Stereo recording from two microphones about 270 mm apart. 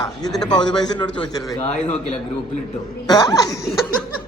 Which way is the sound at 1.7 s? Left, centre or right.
Left.